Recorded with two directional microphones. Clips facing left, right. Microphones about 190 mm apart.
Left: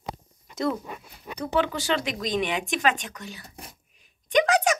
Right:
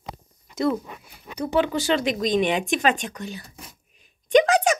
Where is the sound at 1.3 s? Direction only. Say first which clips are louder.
Right 3 dB; 10° right (ahead or behind).